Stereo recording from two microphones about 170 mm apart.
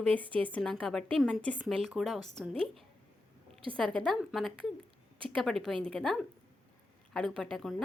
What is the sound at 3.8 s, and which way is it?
A woman's voice, 5° left (ahead or behind).